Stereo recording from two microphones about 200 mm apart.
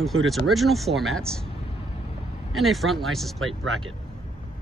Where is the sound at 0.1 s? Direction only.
90° right.